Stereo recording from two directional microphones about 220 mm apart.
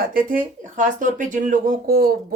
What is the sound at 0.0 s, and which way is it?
Speech, 40° right (ahead or behind).